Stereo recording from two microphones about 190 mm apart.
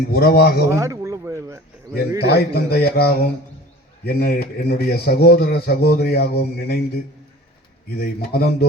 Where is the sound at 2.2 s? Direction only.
55° left (ahead or behind).